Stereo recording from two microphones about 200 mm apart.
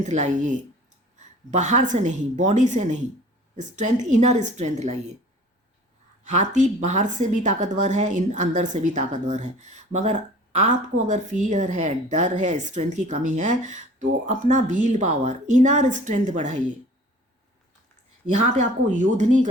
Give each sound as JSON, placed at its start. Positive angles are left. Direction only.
{"t": 0.0, "sound": "a woman's voice", "side_deg": -35}
{"t": 6.2, "sound": "a woman's voice", "side_deg": -35}
{"t": 18.3, "sound": "a woman's voice", "side_deg": -40}